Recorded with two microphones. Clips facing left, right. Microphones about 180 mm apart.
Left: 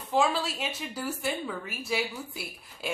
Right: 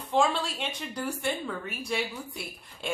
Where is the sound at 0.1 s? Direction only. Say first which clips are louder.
Even; 5° left (ahead or behind).